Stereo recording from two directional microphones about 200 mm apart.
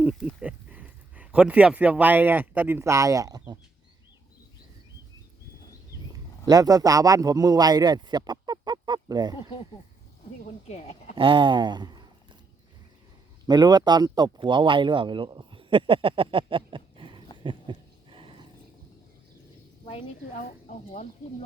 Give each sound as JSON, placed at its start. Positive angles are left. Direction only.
{"t": 0.0, "sound": "speech", "side_deg": -5}
{"t": 6.4, "sound": "a man's voice", "side_deg": -20}
{"t": 10.4, "sound": "speech", "side_deg": 35}
{"t": 11.1, "sound": "speech", "side_deg": -25}
{"t": 13.5, "sound": "speech", "side_deg": -20}
{"t": 17.4, "sound": "a sound", "side_deg": -25}
{"t": 19.8, "sound": "a sound", "side_deg": 25}
{"t": 20.4, "sound": "speech", "side_deg": 40}